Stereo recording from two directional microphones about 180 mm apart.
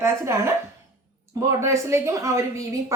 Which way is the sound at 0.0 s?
15° right (ahead or behind).